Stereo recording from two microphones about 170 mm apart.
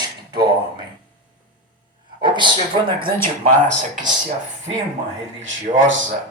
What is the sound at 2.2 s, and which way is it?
Speech, 30° right (ahead or behind).